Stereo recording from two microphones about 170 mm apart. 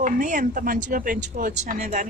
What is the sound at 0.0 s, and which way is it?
Speech, 50° right (ahead or behind).